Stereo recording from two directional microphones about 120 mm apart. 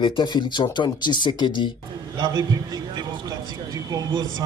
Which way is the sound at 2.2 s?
35° right (ahead or behind).